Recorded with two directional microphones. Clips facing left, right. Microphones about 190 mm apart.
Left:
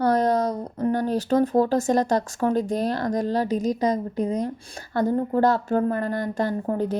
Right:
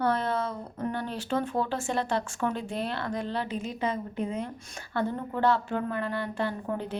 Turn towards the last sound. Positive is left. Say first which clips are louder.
# left 7 dB
turn(degrees=40)  # may be behind; listen again after turning